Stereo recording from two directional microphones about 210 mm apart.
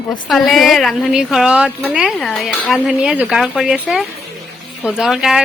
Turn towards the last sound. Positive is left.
turn(degrees=0)  # may be behind; listen again after turning